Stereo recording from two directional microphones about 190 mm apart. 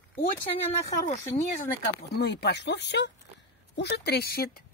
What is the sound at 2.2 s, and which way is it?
Speech, 65° left (ahead or behind).